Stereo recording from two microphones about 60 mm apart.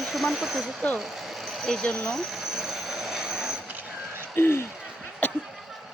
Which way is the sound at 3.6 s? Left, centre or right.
Right.